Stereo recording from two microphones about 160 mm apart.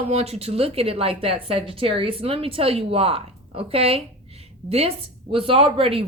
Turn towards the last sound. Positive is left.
turn(degrees=-35)  # may be behind; listen again after turning